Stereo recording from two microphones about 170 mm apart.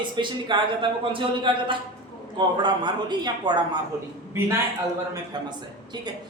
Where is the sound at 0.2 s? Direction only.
30° right (ahead or behind).